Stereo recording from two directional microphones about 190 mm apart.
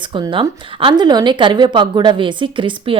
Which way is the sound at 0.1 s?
25° right (ahead or behind).